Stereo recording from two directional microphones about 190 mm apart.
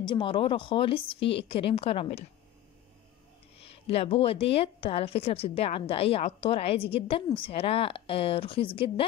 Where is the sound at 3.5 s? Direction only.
30° left (ahead or behind).